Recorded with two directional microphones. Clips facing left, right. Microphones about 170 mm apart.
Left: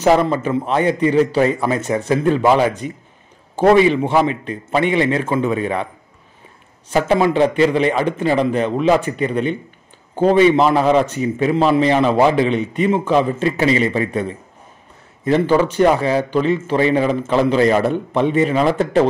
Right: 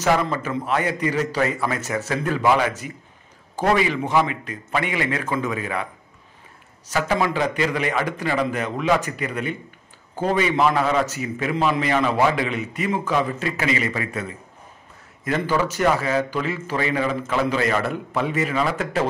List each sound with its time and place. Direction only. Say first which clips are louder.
0.0 s a man's voice: left 6 dB; 25° left (ahead or behind)
6.9 s a man's voice: left 7 dB; 25° left (ahead or behind)